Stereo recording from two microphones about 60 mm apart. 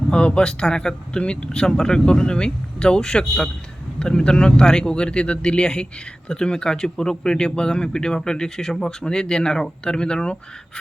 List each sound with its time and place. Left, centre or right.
0.1 s a man's voice: centre
1.6 s speech: centre
1.9 s a man's voice: centre